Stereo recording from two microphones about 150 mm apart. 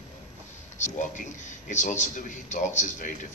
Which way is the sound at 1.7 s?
55° left (ahead or behind).